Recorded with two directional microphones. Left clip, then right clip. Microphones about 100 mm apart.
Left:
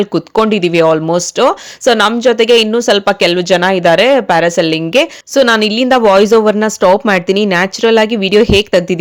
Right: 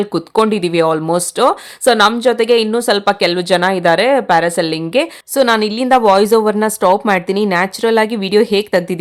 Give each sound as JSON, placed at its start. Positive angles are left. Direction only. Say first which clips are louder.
{"t": 0.0, "sound": "speech", "louder": "left 2 dB", "side_deg": 20}